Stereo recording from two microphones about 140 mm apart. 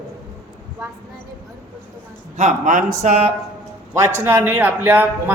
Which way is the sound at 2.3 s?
65° right (ahead or behind).